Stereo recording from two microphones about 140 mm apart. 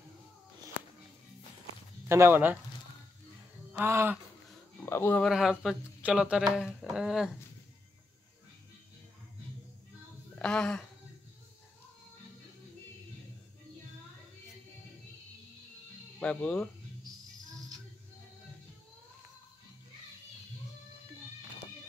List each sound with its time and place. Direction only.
2.0 s speech: 15° right (ahead or behind)
3.8 s speech: 15° right (ahead or behind)
4.8 s speech: 20° left (ahead or behind)
5.2 s speech: centre (ahead or behind)
10.4 s speech: 5° left (ahead or behind)
16.2 s speech: 10° left (ahead or behind)